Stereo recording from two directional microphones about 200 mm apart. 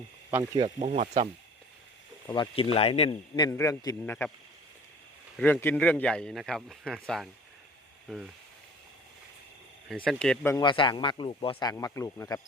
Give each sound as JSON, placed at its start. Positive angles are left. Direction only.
{"t": 0.3, "sound": "speech", "side_deg": -10}
{"t": 0.6, "sound": "speech", "side_deg": -30}
{"t": 2.2, "sound": "speech", "side_deg": 25}
{"t": 5.4, "sound": "speech", "side_deg": 10}
{"t": 9.9, "sound": "speech", "side_deg": 5}
{"t": 10.6, "sound": "speech", "side_deg": 25}